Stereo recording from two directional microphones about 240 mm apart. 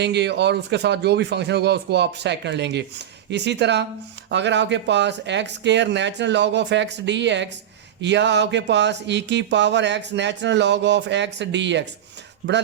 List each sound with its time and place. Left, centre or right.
0.0 s speech: right